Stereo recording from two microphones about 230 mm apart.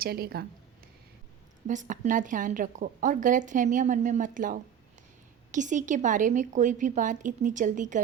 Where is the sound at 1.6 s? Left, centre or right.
Right.